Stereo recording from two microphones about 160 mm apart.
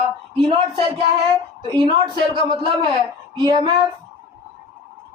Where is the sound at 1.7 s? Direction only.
30° right (ahead or behind).